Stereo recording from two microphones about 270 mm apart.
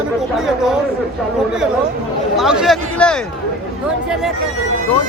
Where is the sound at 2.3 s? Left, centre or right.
Centre.